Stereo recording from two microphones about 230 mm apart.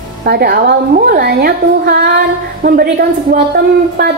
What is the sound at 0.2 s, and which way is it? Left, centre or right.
A woman's voice, right.